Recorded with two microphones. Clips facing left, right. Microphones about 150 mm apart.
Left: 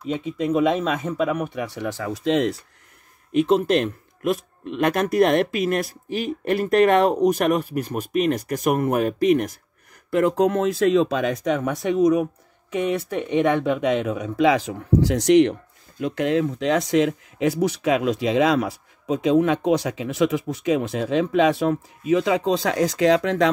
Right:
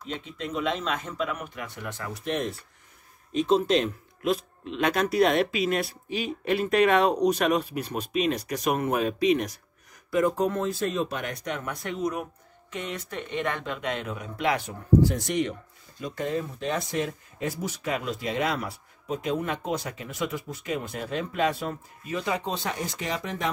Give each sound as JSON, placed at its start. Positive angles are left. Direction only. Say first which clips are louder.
{"t": 0.0, "sound": "speech", "louder": "left 10 dB", "side_deg": 10}
{"t": 1.4, "sound": "speech", "louder": "left 10 dB", "side_deg": 85}
{"t": 3.3, "sound": "speech", "louder": "left 4 dB", "side_deg": 60}
{"t": 10.1, "sound": "speech", "louder": "left 5 dB", "side_deg": 75}
{"t": 13.2, "sound": "speech", "louder": "left 10 dB", "side_deg": 15}
{"t": 13.7, "sound": "speech", "louder": "left 10 dB", "side_deg": 90}